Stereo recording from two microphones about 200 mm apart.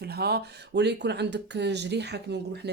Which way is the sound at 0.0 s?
55° right (ahead or behind).